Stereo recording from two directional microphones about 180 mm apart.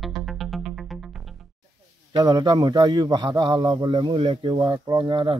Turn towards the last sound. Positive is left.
turn(degrees=-25)  # may be behind; listen again after turning